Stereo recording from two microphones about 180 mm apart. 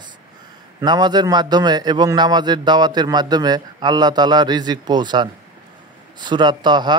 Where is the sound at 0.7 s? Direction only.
25° right (ahead or behind).